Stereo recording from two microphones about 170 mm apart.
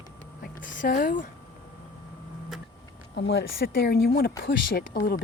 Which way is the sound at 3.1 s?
85° left.